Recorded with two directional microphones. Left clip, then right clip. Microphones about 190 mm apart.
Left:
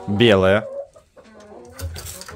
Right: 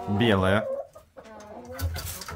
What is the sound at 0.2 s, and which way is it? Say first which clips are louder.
Speech: left 9 dB; 35° left (ahead or behind).